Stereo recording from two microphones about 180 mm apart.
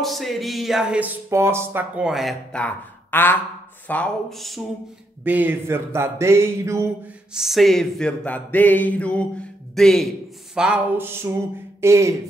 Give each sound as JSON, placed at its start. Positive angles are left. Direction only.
{"t": 0.0, "sound": "speech", "side_deg": 0}
{"t": 5.2, "sound": "music", "side_deg": -10}
{"t": 7.3, "sound": "a sound", "side_deg": 0}
{"t": 9.8, "sound": "speech", "side_deg": 0}
{"t": 10.5, "sound": "music", "side_deg": -5}